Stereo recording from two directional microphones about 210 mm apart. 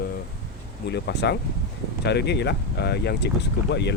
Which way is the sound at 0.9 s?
55° left (ahead or behind).